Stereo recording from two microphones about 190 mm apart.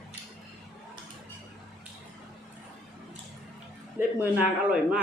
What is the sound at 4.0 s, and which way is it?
Speech, 10° right (ahead or behind).